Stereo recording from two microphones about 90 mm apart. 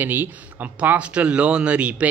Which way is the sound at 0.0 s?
20° right (ahead or behind).